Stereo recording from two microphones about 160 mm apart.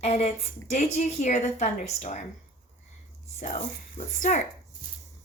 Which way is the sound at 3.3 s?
50° left (ahead or behind).